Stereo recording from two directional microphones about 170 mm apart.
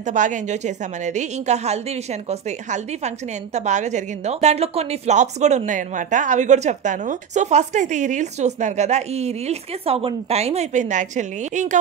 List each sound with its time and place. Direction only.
0.0 s a woman's voice: 50° right (ahead or behind)